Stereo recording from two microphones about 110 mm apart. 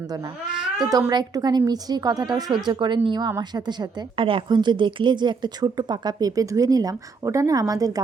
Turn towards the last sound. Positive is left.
turn(degrees=-35)  # may be behind; listen again after turning